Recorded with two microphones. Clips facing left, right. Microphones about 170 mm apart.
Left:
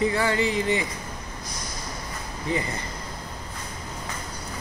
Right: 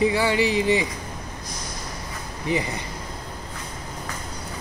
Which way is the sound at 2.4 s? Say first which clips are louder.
Right 3 dB; 15° right (ahead or behind).